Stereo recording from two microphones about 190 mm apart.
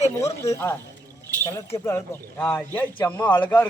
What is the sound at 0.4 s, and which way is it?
A man's voice, 15° left (ahead or behind).